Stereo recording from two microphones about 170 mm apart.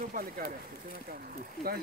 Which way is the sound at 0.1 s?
55° right (ahead or behind).